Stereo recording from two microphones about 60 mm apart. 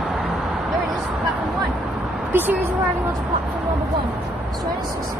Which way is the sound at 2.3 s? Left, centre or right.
Right.